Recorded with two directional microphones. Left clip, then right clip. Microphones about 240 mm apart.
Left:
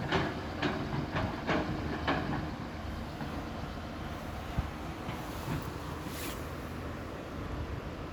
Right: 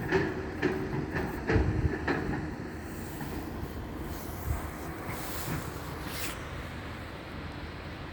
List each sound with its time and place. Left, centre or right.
0.1 s train: left
2.0 s vehicle: centre